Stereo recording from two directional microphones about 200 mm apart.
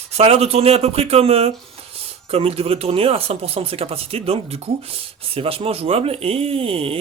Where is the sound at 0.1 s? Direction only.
30° right (ahead or behind).